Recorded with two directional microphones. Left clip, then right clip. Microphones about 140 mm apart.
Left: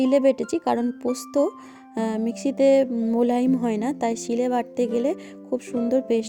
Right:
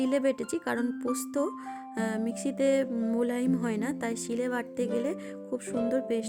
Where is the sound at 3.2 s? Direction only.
20° left (ahead or behind).